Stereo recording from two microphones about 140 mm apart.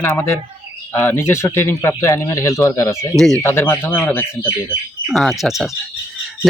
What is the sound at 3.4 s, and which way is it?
Speech, 20° left (ahead or behind).